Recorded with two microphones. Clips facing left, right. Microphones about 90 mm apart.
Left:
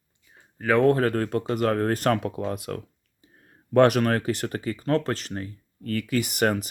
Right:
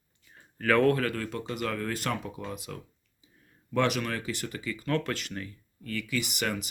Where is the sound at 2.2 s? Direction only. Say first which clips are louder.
Left 8 dB; 60° left (ahead or behind).